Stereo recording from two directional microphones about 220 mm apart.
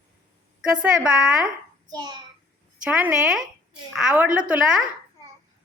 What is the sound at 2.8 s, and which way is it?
A woman's voice, 5° right (ahead or behind).